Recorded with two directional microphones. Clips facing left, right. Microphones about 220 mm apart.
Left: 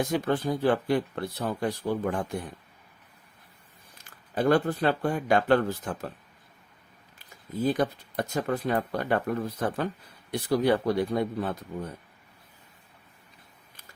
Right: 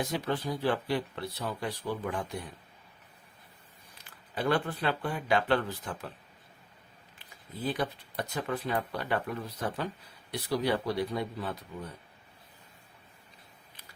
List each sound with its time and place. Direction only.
0.0 s speech: 50° left (ahead or behind)
4.4 s speech: 45° left (ahead or behind)
7.2 s speech: 45° left (ahead or behind)